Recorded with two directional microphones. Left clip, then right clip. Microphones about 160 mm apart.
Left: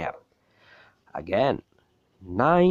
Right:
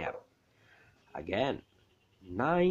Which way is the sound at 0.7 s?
30° left (ahead or behind).